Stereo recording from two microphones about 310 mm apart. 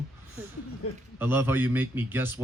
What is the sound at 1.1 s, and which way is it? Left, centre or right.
Speech, centre.